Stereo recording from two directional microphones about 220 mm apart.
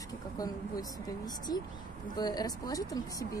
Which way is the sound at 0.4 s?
15° left (ahead or behind).